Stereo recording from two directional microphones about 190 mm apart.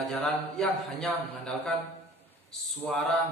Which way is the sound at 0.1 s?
5° left (ahead or behind).